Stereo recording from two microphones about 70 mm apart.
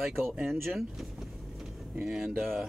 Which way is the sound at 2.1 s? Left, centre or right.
Centre.